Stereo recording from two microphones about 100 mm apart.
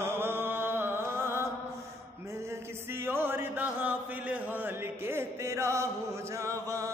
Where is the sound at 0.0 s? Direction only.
25° right (ahead or behind).